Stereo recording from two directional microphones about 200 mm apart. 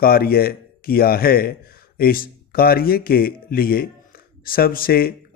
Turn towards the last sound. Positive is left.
turn(degrees=50)  # may be behind; listen again after turning